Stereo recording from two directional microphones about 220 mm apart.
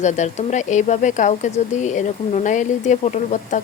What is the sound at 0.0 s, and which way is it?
Speech, 30° left (ahead or behind).